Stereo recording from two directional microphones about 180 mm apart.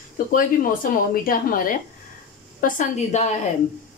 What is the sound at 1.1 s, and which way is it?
A woman's voice, 50° left (ahead or behind).